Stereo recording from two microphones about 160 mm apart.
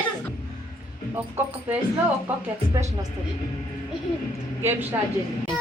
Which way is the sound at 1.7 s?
10° right (ahead or behind).